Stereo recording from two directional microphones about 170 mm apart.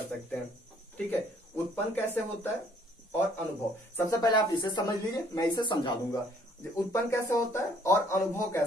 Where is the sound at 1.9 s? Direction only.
10° left (ahead or behind).